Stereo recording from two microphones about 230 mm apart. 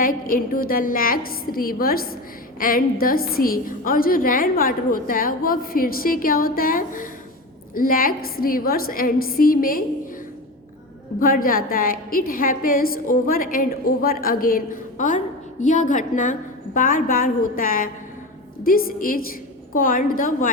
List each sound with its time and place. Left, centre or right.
0.0 s a woman's voice: left
11.2 s a woman's voice: left